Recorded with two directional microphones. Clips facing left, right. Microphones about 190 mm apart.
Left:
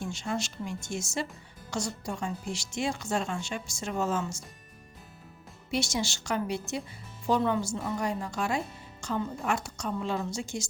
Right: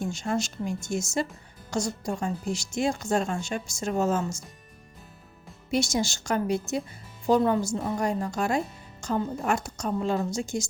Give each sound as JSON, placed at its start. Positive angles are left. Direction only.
{"t": 0.0, "sound": "speech", "side_deg": -45}
{"t": 5.7, "sound": "speech", "side_deg": -45}